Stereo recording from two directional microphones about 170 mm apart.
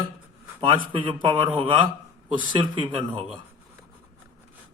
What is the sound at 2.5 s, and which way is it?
Speech, 30° right (ahead or behind).